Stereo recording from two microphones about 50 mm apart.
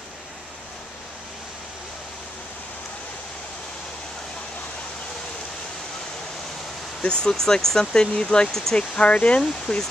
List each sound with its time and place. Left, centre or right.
7.0 s speech: centre
8.5 s speech: centre
8.7 s speech: left
9.4 s speech: centre